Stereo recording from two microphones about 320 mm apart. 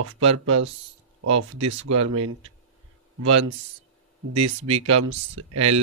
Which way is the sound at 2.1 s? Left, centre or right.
Right.